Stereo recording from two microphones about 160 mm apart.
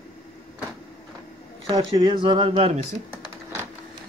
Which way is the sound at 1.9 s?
35° right (ahead or behind).